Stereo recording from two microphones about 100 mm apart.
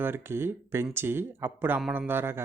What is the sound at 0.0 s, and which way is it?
Speech, 25° right (ahead or behind).